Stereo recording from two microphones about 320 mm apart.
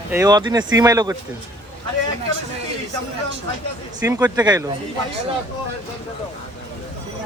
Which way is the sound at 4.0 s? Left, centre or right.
Centre.